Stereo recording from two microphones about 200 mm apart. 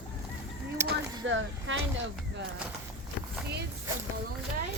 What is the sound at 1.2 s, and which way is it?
Speech, 75° right (ahead or behind).